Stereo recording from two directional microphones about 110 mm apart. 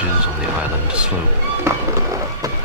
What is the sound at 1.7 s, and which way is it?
Speech, 25° right (ahead or behind).